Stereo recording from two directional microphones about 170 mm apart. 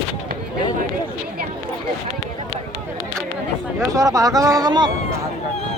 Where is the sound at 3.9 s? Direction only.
20° right (ahead or behind).